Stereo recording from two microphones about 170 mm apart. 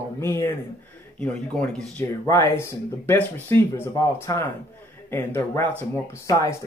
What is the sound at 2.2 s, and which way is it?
Speech, 15° left (ahead or behind).